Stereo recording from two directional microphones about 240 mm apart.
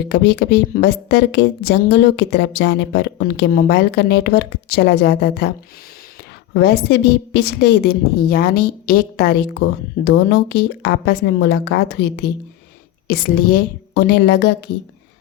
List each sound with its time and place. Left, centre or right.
0.1 s a woman's voice: left
6.5 s a woman's voice: left